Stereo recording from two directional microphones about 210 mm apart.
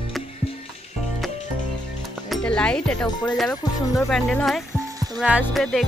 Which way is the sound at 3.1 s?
20° left (ahead or behind).